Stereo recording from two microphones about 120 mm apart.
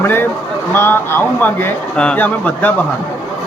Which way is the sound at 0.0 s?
15° left (ahead or behind).